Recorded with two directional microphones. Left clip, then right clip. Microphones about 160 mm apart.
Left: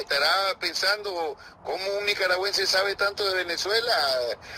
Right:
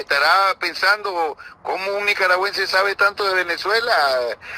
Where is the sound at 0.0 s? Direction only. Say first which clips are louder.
Right 8 dB; 15° left (ahead or behind).